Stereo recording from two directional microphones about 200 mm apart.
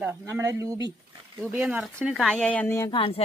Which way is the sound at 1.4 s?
5° right (ahead or behind).